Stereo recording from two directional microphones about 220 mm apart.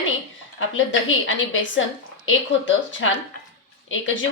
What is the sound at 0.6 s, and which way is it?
A woman's voice, 60° left (ahead or behind).